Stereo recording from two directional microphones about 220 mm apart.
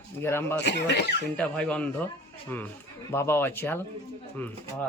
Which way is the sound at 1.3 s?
5° left (ahead or behind).